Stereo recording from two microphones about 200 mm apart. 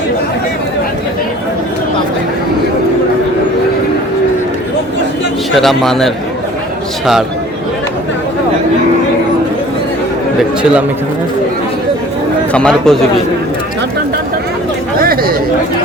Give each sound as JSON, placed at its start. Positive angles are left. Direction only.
{"t": 5.5, "sound": "a man's voice", "side_deg": 0}
{"t": 10.6, "sound": "a man's voice", "side_deg": -5}
{"t": 12.5, "sound": "a man's voice", "side_deg": 5}
{"t": 14.9, "sound": "speech", "side_deg": -50}